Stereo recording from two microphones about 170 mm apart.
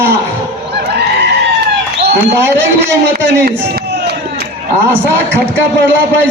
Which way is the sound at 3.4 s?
70° right (ahead or behind).